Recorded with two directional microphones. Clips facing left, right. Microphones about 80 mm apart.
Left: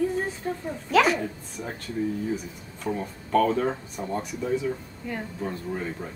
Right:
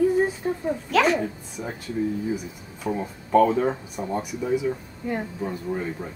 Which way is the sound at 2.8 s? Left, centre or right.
Centre.